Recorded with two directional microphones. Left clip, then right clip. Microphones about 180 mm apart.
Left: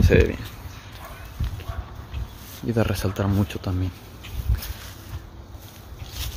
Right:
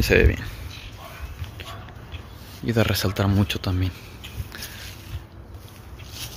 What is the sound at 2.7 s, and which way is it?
Speech, centre (ahead or behind).